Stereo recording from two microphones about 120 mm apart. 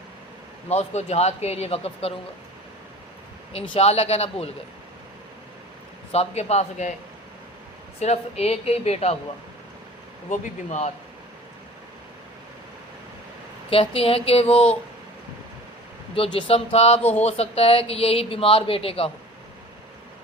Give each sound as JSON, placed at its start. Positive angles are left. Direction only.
{"t": 0.7, "sound": "speech", "side_deg": 65}
{"t": 3.5, "sound": "speech", "side_deg": 50}
{"t": 6.1, "sound": "speech", "side_deg": 60}
{"t": 7.9, "sound": "speech", "side_deg": 60}
{"t": 10.2, "sound": "speech", "side_deg": 85}
{"t": 13.7, "sound": "speech", "side_deg": 50}
{"t": 16.1, "sound": "speech", "side_deg": 50}
{"t": 17.0, "sound": "a sound", "side_deg": 15}
{"t": 17.2, "sound": "speech", "side_deg": 60}